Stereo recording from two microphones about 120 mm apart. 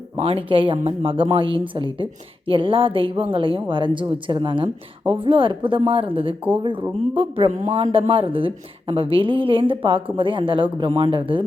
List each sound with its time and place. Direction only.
0.2 s a woman's voice: 55° right (ahead or behind)